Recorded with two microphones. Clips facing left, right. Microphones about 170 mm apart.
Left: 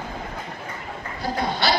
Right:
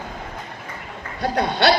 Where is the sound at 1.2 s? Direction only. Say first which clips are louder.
Right 5 dB; 70° right (ahead or behind).